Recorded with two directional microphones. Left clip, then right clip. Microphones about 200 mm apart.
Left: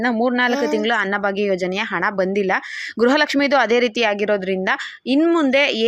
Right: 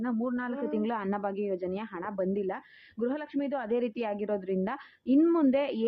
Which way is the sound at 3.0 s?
35° left (ahead or behind).